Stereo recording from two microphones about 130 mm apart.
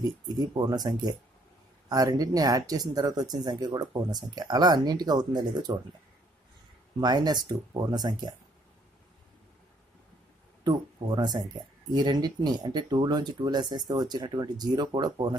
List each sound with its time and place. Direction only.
0.0 s speech: 30° right (ahead or behind)
7.0 s speech: 30° right (ahead or behind)
10.6 s speech: 35° right (ahead or behind)